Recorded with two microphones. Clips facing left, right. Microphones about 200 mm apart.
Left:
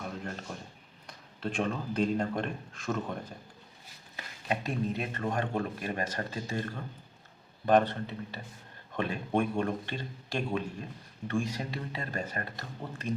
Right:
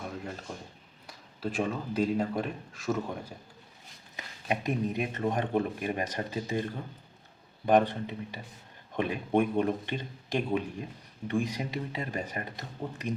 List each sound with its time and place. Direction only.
1.0 s speech: 5° right (ahead or behind)
4.4 s speech: 15° right (ahead or behind)